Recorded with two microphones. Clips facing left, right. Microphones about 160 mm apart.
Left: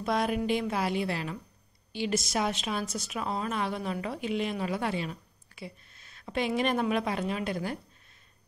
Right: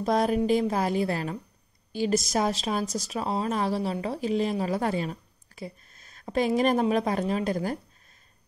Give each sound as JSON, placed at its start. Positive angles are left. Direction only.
{"t": 0.0, "sound": "a woman's voice", "side_deg": -40}